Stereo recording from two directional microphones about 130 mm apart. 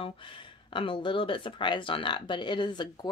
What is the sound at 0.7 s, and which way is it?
Speech, 40° left (ahead or behind).